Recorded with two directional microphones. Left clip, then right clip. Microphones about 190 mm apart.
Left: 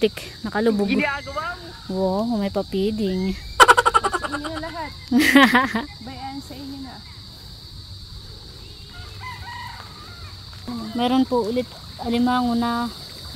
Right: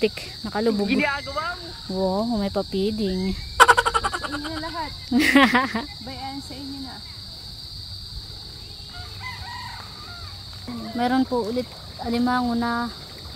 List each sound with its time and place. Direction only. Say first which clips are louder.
0.0 s speech: left 2 dB; 15° left (ahead or behind)
0.7 s speech: left 1 dB; centre (ahead or behind)
3.5 s a sound: left 2 dB; centre (ahead or behind)
4.7 s speech: left 2 dB; 15° left (ahead or behind)
11.0 s speech: left 2 dB; 5° left (ahead or behind)